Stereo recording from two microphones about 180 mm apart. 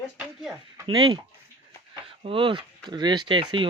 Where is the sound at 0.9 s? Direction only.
25° right (ahead or behind).